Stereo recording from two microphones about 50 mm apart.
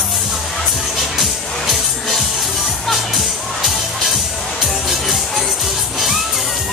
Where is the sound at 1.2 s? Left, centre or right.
Centre.